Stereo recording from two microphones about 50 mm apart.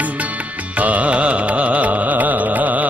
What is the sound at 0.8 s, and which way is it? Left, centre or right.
Music, right.